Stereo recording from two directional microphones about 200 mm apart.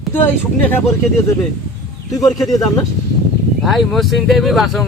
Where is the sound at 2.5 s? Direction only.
20° left (ahead or behind).